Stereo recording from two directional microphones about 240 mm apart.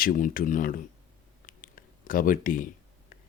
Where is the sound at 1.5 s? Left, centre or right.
Left.